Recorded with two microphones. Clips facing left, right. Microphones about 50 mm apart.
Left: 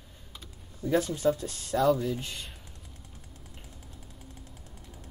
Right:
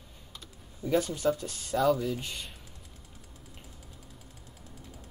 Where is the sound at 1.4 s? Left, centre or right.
Centre.